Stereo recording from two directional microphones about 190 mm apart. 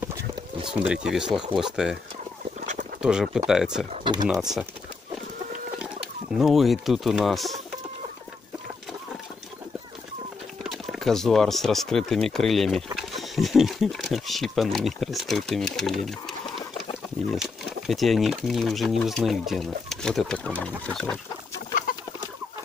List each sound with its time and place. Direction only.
0.8 s speech: 5° right (ahead or behind)
2.6 s duck: 40° right (ahead or behind)
3.0 s speech: 5° right (ahead or behind)
3.9 s speech: 25° right (ahead or behind)
4.3 s speech: centre (ahead or behind)
6.3 s speech: centre (ahead or behind)
10.6 s speech: centre (ahead or behind)
16.1 s bird: centre (ahead or behind)
17.3 s speech: centre (ahead or behind)